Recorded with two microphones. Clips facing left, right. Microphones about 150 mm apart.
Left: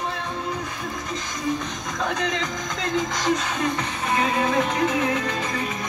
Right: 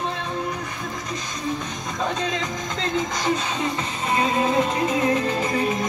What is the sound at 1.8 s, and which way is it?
Music, 25° right (ahead or behind).